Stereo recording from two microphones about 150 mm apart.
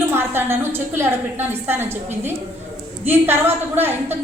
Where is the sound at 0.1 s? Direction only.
15° right (ahead or behind).